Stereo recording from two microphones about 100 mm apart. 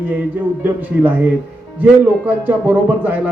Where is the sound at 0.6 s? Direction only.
20° right (ahead or behind).